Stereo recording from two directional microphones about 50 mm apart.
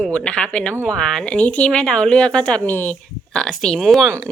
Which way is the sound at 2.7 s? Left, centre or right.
Left.